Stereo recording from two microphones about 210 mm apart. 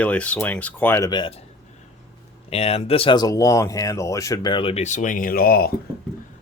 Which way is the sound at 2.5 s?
30° left (ahead or behind).